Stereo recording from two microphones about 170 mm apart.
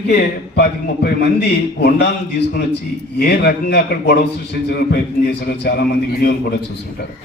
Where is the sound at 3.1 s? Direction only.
70° left (ahead or behind).